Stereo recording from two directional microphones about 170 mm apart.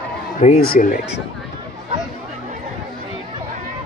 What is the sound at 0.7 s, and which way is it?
Speech, 55° left (ahead or behind).